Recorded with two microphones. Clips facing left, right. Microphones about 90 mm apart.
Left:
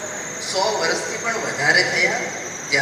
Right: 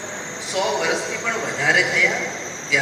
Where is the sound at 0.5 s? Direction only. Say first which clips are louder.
Left 1 dB; 15° left (ahead or behind).